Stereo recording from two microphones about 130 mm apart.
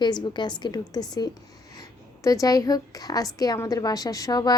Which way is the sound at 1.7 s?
25° left (ahead or behind).